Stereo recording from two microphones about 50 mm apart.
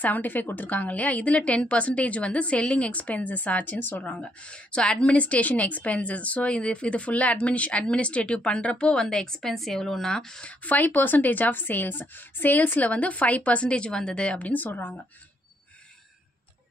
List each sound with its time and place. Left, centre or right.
0.0 s a woman's voice: left
3.8 s a woman's voice: left
4.1 s a woman's voice: left
10.6 s a woman's voice: left